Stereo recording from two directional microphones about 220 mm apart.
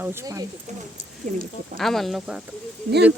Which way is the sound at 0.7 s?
30° right (ahead or behind).